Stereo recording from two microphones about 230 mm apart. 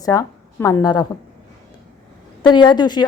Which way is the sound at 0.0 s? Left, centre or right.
Centre.